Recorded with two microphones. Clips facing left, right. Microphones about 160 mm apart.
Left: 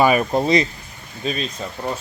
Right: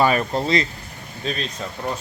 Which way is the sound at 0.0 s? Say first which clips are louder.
Left 3 dB; 15° left (ahead or behind).